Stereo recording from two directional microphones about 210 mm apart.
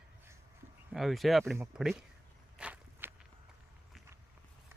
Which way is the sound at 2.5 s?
5° right (ahead or behind).